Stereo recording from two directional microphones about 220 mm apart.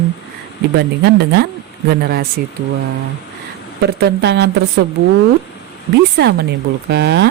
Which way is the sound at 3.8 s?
50° right (ahead or behind).